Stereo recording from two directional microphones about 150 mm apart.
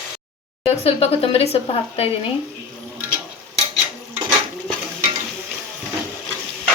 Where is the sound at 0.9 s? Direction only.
40° left (ahead or behind).